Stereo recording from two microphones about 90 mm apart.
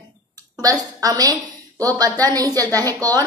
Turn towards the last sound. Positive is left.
turn(degrees=-45)  # may be behind; listen again after turning